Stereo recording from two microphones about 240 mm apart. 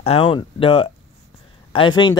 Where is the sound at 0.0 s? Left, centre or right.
Left.